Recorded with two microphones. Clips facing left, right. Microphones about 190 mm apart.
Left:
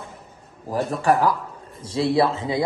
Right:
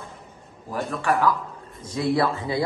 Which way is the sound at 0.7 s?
35° left (ahead or behind).